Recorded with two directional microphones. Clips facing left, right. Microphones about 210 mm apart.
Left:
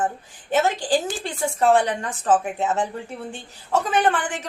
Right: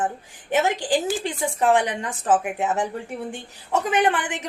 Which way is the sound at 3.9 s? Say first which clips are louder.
Right 1 dB; 15° right (ahead or behind).